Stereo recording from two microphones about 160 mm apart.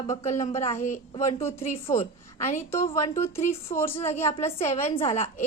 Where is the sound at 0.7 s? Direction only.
15° left (ahead or behind).